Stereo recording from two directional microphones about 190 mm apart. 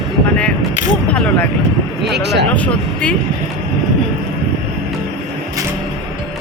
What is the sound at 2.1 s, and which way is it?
Speech, 60° right (ahead or behind).